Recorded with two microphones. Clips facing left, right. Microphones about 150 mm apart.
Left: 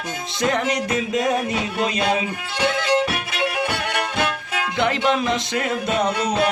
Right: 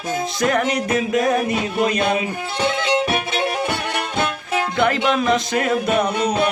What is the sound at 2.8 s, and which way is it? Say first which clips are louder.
Music: right 1 dB; 20° right (ahead or behind).